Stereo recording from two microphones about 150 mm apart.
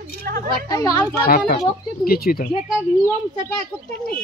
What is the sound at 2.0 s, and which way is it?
Speech, 85° left.